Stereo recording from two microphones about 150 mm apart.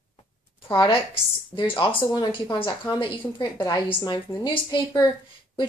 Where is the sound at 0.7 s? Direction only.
30° left (ahead or behind).